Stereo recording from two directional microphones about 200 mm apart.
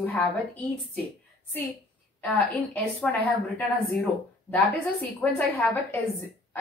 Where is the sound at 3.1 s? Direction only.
5° left (ahead or behind).